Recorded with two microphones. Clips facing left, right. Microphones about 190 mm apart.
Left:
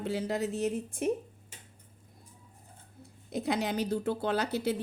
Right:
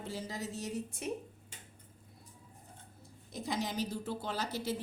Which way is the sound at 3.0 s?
65° left (ahead or behind).